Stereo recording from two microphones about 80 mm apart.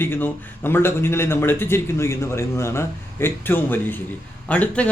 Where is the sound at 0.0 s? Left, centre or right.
Left.